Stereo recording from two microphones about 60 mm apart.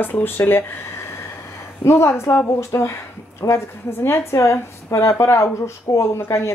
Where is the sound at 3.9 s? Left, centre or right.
Left.